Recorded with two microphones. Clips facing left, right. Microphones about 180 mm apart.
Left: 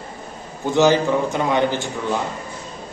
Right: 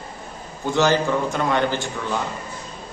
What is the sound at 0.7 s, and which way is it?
A man's voice, 15° left (ahead or behind).